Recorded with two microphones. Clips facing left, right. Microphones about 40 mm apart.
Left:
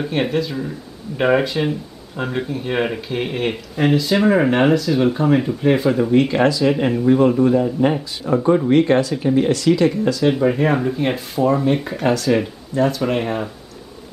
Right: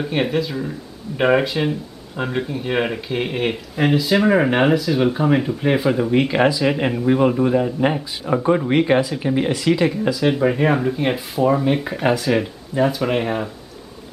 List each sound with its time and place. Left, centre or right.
0.0 s speech: centre